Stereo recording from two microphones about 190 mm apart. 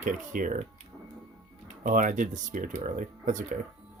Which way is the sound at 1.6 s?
45° right (ahead or behind).